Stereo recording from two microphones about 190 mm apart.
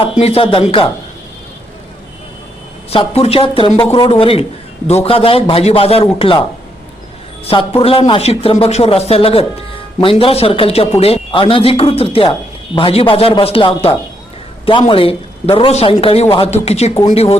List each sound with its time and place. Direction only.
0.2 s speech: 30° left (ahead or behind)
2.9 s speech: 30° left (ahead or behind)
7.4 s speech: 30° left (ahead or behind)